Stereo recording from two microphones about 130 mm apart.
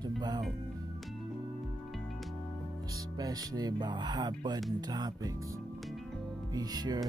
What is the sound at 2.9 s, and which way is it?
Speech, 30° right (ahead or behind).